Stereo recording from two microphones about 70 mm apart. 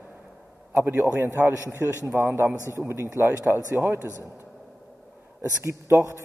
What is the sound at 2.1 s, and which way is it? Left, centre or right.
Speech, right.